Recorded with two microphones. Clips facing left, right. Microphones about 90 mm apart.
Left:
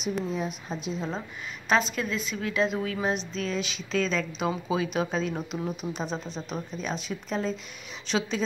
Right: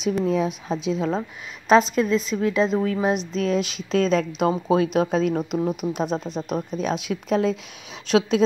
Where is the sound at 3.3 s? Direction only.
50° right (ahead or behind).